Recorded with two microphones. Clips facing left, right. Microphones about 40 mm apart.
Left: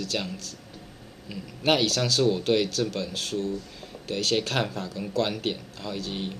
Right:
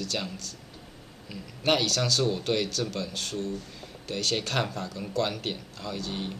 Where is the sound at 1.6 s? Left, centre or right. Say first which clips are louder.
Left 2 dB; centre.